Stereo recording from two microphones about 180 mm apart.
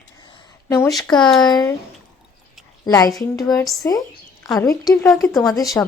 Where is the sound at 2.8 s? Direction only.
20° left (ahead or behind).